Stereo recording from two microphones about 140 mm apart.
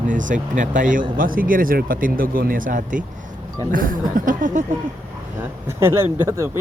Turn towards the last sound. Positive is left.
turn(degrees=-20)  # may be behind; listen again after turning